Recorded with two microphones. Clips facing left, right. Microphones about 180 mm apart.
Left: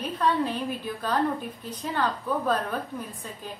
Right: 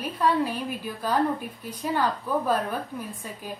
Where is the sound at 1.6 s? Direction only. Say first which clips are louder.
Right 3 dB; 10° right (ahead or behind).